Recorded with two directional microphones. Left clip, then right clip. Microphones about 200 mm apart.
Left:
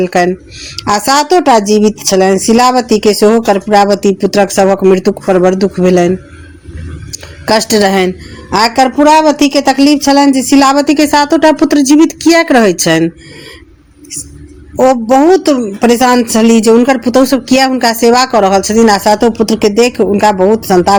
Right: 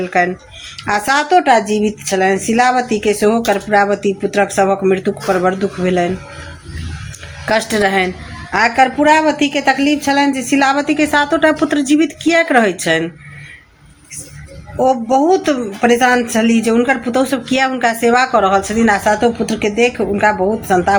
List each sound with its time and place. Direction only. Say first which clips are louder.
0.0 s speech: left 5 dB; 40° left (ahead or behind)
7.4 s a woman's voice: left 5 dB; 45° left (ahead or behind)
14.8 s speech: left 6 dB; 35° left (ahead or behind)